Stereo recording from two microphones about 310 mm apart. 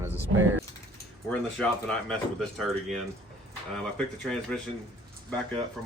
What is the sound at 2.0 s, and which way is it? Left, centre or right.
Speech, centre.